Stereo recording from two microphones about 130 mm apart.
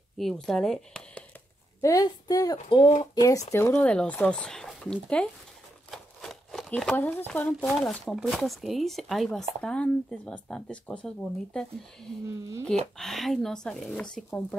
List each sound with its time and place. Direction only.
0.2 s speech: centre (ahead or behind)
1.8 s a woman's voice: 25° left (ahead or behind)
3.5 s speech: 15° left (ahead or behind)
5.9 s a sound: centre (ahead or behind)
7.0 s speech: 15° left (ahead or behind)